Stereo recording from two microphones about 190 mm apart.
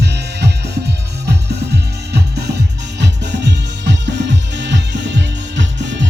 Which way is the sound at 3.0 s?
65° right (ahead or behind).